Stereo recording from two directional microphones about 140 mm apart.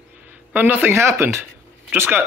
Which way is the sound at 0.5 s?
10° right (ahead or behind).